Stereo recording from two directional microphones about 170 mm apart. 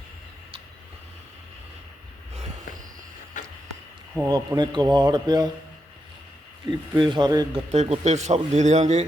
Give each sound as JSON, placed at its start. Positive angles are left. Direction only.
{"t": 3.3, "sound": "music", "side_deg": 50}
{"t": 4.3, "sound": "a man's voice", "side_deg": -25}
{"t": 6.7, "sound": "a man's voice", "side_deg": -25}
{"t": 7.7, "sound": "a man's voice", "side_deg": -40}